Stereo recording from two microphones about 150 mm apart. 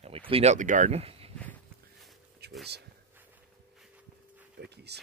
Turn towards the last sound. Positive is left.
turn(degrees=-90)